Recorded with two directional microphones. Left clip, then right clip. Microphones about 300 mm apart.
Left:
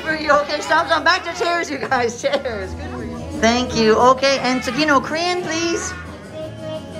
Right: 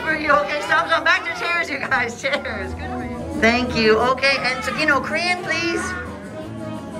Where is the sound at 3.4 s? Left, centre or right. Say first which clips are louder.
Left 1 dB; centre.